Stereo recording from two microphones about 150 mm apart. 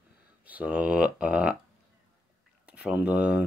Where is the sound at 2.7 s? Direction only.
10° right (ahead or behind).